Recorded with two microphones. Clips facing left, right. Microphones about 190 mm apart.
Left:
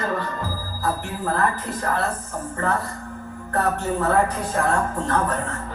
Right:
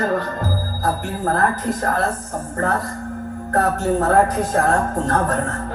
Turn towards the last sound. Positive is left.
turn(degrees=-40)  # may be behind; listen again after turning